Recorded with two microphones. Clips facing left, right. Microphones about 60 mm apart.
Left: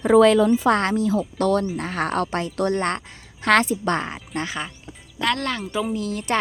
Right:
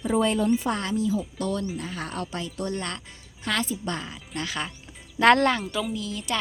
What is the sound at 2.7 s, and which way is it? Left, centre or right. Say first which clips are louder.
Speech: left 9 dB; left.